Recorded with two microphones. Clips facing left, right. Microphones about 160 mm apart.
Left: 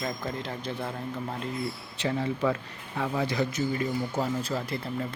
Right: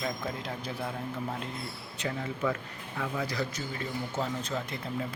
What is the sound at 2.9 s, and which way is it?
Speech, 25° left (ahead or behind).